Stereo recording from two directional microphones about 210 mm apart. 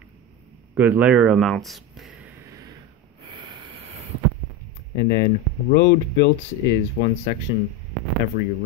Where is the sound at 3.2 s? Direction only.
20° right (ahead or behind).